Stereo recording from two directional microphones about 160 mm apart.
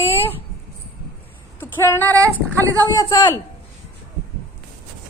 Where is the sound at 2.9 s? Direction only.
20° left (ahead or behind).